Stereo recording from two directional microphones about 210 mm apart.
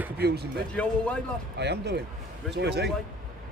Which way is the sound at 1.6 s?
55° right (ahead or behind).